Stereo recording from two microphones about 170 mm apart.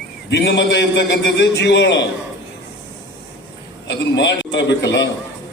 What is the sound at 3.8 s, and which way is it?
A man's voice, 90° left.